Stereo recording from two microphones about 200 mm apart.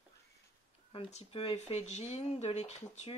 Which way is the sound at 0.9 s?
30° left (ahead or behind).